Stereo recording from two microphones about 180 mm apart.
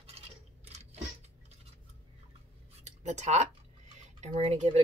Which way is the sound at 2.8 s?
40° right (ahead or behind).